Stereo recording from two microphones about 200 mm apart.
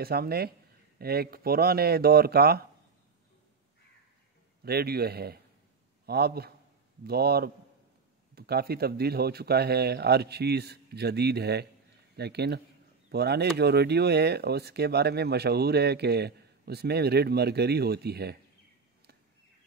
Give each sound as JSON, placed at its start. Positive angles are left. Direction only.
{"t": 0.0, "sound": "speech", "side_deg": -50}
{"t": 4.6, "sound": "a man's voice", "side_deg": -50}